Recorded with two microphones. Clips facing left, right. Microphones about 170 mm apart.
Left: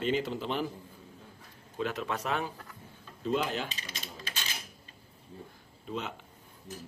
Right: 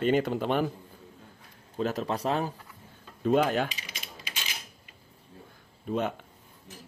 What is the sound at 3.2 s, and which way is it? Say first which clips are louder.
Speech: right 7 dB; 55° right (ahead or behind).